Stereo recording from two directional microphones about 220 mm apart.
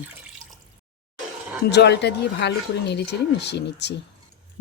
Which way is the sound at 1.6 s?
50° left (ahead or behind).